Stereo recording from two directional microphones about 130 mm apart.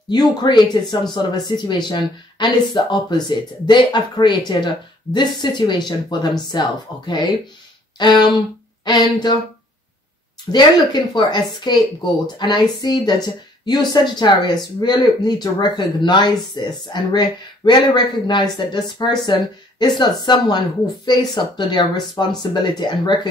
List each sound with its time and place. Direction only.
0.1 s speech: 30° left (ahead or behind)
10.5 s speech: 35° left (ahead or behind)